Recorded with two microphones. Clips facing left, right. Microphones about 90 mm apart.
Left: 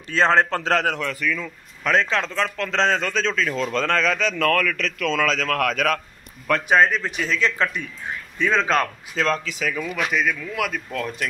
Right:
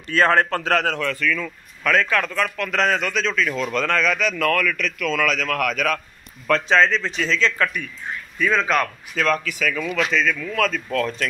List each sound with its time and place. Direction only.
0.1 s a man's voice: 20° left (ahead or behind)
6.4 s a man's voice: 15° left (ahead or behind)